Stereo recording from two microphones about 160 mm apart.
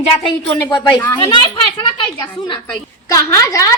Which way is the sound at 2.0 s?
30° left (ahead or behind).